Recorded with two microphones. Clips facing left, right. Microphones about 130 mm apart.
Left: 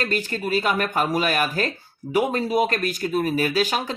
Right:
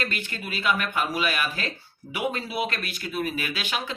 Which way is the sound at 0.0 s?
40° left (ahead or behind).